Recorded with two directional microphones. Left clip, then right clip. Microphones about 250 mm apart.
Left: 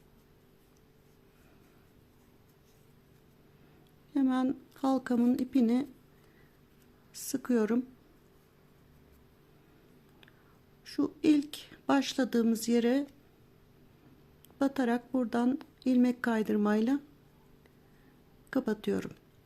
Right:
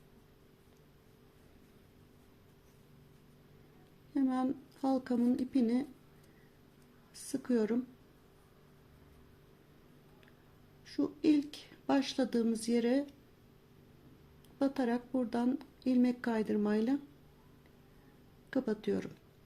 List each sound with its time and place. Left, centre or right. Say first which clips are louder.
4.1 s speech: left 4 dB; left
7.1 s speech: left 3 dB; left
10.8 s a woman's voice: left 3 dB; left
14.6 s a woman's voice: left 3 dB; centre
18.5 s a woman's voice: left 3 dB; left